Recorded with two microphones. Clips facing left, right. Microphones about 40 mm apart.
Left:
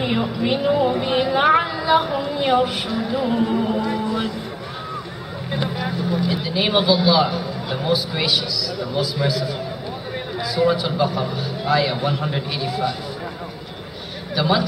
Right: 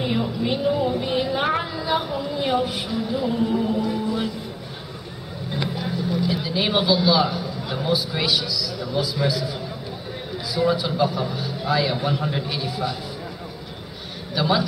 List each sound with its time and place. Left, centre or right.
0.0 s speech: left
1.4 s a sound: left
1.7 s a sound: left
2.0 s speech: left
5.5 s speech: left
6.2 s a man's voice: centre
14.3 s a man's voice: centre